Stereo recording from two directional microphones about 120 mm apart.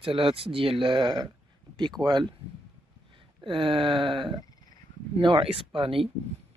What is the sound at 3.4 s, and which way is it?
Speech, 45° right (ahead or behind).